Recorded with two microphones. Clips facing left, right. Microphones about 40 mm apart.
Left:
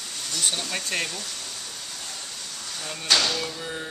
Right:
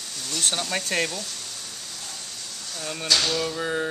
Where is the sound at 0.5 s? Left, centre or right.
Centre.